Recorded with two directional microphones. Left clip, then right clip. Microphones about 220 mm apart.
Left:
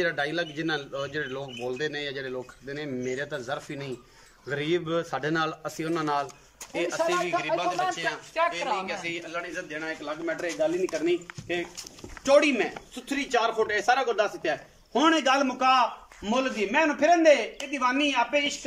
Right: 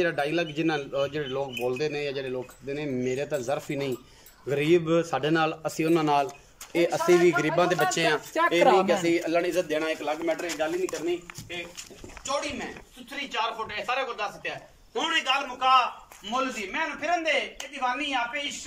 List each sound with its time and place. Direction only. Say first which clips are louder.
0.0 s a man's voice: right 1 dB; 5° right (ahead or behind)
6.7 s speech: right 4 dB; 25° right (ahead or behind)
12.3 s a man's voice: left 10 dB; 45° left (ahead or behind)